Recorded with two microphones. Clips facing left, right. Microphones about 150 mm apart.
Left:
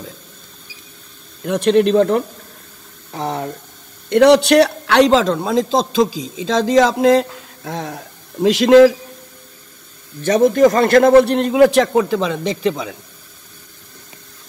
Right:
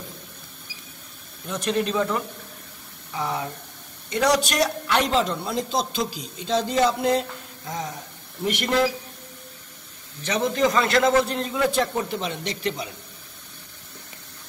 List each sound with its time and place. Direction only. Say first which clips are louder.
1.4 s a man's voice: left 11 dB; 70° left (ahead or behind); by 3.4 s 55° left (ahead or behind)
4.1 s a man's voice: left 12 dB; 65° left (ahead or behind); by 8.9 s 90° left
10.2 s a man's voice: left 10 dB; 45° left (ahead or behind); by 12.1 s 90° left